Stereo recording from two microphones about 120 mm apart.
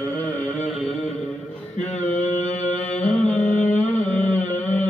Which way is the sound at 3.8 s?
10° left (ahead or behind).